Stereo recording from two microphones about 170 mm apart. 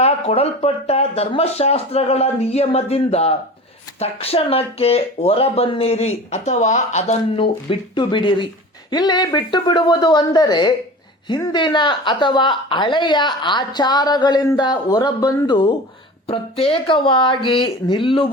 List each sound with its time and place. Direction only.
0.0 s a woman's voice: 35° left (ahead or behind)